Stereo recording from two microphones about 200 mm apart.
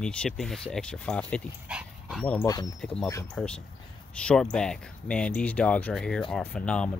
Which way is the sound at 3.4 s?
Centre (ahead or behind).